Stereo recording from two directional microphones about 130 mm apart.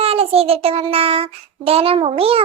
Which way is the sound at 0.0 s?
50° right (ahead or behind).